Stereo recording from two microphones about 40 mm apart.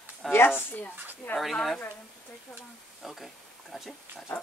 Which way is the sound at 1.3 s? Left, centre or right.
Centre.